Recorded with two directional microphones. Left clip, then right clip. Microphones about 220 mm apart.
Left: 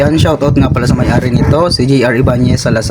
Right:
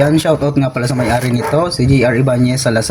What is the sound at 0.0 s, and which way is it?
Speech, 20° left (ahead or behind).